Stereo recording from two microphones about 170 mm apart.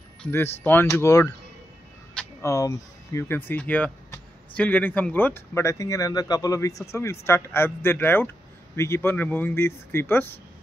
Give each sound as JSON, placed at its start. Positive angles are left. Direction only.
{"t": 0.2, "sound": "speech", "side_deg": 10}
{"t": 2.4, "sound": "speech", "side_deg": 15}